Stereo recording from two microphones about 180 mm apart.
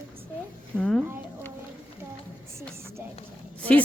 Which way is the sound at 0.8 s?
Centre (ahead or behind).